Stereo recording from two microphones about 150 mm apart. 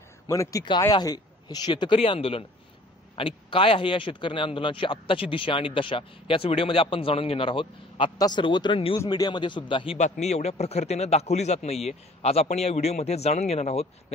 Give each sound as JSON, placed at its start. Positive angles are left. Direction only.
{"t": 0.3, "sound": "speech", "side_deg": 20}
{"t": 9.9, "sound": "a man's voice", "side_deg": 50}